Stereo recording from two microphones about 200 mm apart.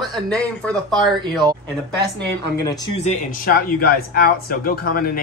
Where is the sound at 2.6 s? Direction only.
20° left (ahead or behind).